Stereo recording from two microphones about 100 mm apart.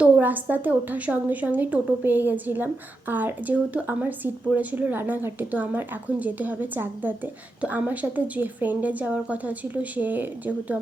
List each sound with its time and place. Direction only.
0.0 s speech: 20° right (ahead or behind)